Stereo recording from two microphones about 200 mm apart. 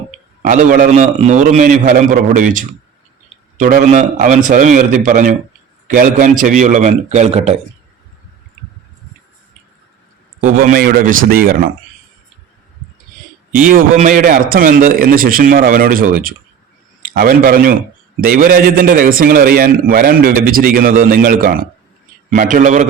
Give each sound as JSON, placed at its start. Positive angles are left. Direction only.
{"t": 0.4, "sound": "a man's voice", "side_deg": -40}
{"t": 10.4, "sound": "a man's voice", "side_deg": -45}
{"t": 13.5, "sound": "a man's voice", "side_deg": -45}